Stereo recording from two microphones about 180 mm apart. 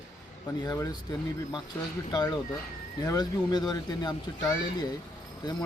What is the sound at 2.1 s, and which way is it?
Speech, 20° left (ahead or behind).